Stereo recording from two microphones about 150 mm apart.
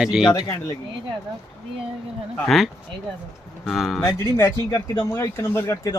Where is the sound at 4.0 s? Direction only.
15° left (ahead or behind).